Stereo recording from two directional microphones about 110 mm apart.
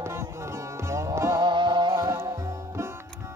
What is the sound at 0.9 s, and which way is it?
Music, 25° right (ahead or behind).